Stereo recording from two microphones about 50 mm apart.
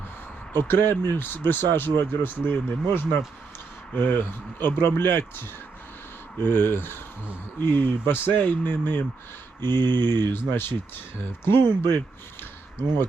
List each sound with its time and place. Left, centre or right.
0.5 s speech: left